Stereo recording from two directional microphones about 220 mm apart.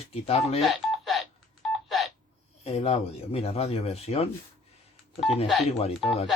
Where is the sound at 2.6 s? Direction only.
30° left (ahead or behind).